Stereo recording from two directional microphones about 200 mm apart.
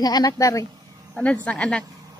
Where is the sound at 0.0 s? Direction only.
20° left (ahead or behind).